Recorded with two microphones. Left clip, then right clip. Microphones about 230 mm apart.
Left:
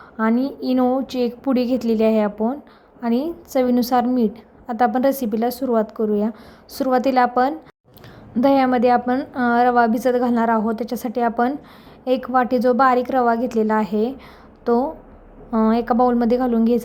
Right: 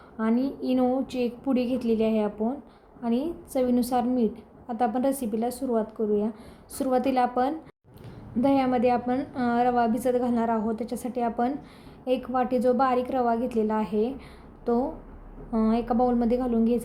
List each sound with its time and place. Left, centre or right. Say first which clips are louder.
0.2 s a woman's voice: left 6 dB; centre